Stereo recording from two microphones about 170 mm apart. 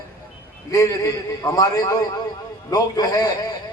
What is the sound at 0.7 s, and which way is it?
A man's voice, 20° left (ahead or behind).